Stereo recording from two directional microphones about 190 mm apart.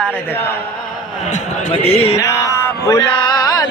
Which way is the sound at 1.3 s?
35° left (ahead or behind).